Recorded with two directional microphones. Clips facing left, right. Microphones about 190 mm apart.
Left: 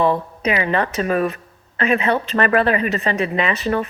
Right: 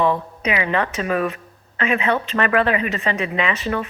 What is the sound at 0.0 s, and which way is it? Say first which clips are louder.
A woman's voice: left 2 dB; 35° left (ahead or behind).